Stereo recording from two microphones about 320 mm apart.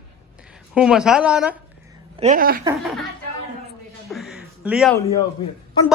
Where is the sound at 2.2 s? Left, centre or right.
Right.